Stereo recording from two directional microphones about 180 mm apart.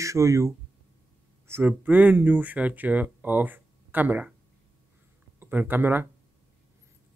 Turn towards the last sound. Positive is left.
turn(degrees=-10)  # may be behind; listen again after turning